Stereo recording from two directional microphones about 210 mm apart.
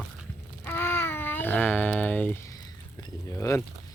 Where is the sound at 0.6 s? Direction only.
10° left (ahead or behind).